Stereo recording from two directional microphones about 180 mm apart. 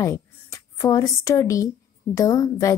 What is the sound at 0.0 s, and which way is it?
A woman's voice, 15° left (ahead or behind).